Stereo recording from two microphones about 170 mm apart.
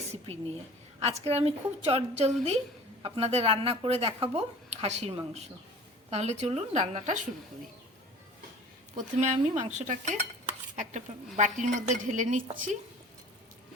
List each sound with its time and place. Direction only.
0.9 s speech: 35° right (ahead or behind)
9.0 s a woman's voice: 45° right (ahead or behind)